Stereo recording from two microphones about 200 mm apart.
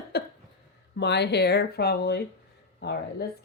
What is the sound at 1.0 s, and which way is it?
Speech, 60° left (ahead or behind).